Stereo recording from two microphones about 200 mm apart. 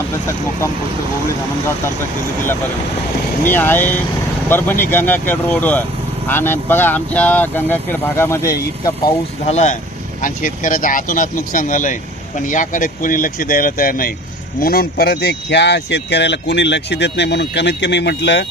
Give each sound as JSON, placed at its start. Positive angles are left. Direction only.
{"t": 3.4, "sound": "speech", "side_deg": 10}
{"t": 9.5, "sound": "speech", "side_deg": 35}